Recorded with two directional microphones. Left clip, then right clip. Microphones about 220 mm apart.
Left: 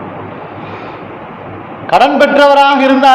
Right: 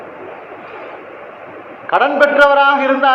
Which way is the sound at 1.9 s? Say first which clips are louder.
Left 4 dB; 55° left (ahead or behind).